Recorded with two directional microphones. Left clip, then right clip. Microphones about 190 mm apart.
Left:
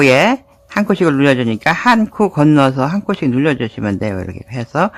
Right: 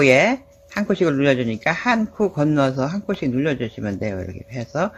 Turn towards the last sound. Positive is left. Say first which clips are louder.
# left 7 dB
turn(degrees=35)  # may be behind; listen again after turning